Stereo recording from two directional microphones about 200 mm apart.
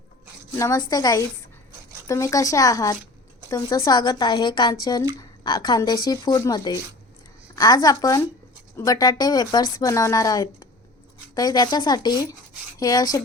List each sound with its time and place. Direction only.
0.5 s speech: 15° left (ahead or behind)